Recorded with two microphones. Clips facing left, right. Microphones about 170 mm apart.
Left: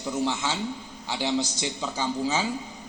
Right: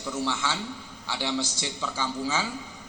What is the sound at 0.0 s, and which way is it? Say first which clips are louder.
A man's voice: left 2 dB; 20° left (ahead or behind).